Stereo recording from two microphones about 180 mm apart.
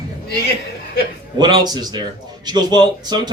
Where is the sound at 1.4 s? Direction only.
25° right (ahead or behind).